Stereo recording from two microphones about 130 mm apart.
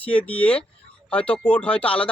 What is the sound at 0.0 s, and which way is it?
Speech, 10° left (ahead or behind).